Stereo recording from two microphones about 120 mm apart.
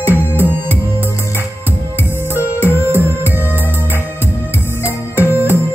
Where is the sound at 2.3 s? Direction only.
15° right (ahead or behind).